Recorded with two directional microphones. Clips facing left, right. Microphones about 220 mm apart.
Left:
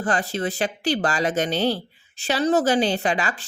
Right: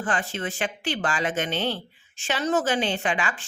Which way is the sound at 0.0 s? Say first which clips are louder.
Left 4 dB; 40° left (ahead or behind).